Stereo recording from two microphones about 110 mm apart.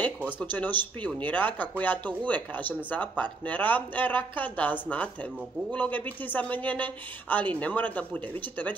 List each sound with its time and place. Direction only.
0.0 s speech: 15° left (ahead or behind)